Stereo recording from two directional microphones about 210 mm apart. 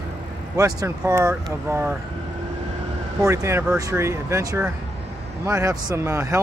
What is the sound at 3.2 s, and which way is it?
Speech, 15° right (ahead or behind).